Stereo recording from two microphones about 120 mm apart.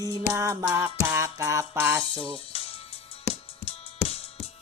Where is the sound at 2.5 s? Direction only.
55° left (ahead or behind).